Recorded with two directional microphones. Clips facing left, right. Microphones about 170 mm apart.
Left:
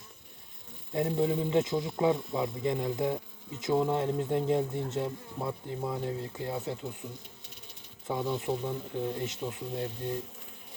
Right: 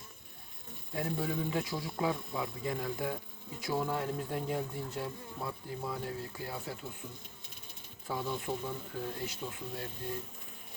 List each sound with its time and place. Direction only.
0.9 s speech: 25° left (ahead or behind)
8.0 s speech: 20° left (ahead or behind)